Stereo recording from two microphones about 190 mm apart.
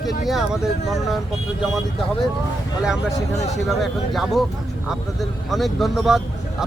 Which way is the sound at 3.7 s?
Centre (ahead or behind).